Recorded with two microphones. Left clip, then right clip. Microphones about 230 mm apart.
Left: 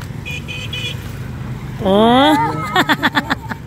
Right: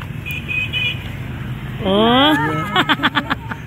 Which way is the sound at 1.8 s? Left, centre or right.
Left.